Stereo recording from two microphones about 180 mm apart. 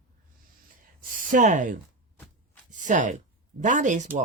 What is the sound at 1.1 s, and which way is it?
Speech, 45° right (ahead or behind).